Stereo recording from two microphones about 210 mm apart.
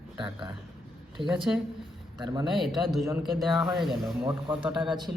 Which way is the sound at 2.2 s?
20° right (ahead or behind).